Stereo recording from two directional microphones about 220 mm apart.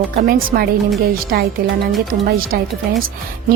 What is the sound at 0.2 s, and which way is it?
Speech, 40° right (ahead or behind).